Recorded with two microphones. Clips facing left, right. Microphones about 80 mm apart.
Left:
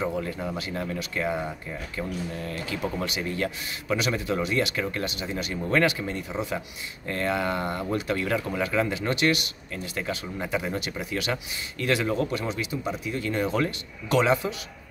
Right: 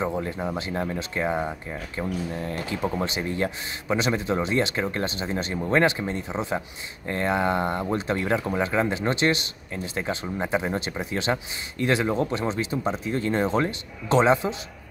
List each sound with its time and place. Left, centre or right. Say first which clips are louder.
0.0 s a man's voice: right 2 dB; right